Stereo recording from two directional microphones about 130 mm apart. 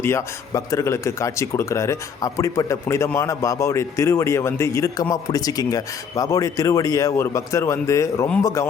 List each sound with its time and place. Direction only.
0.0 s speech: 20° left (ahead or behind)